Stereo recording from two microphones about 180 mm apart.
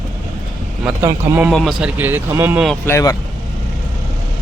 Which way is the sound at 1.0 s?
15° right (ahead or behind).